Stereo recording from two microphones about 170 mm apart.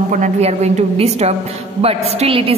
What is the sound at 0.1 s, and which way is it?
A woman's voice, 45° right (ahead or behind).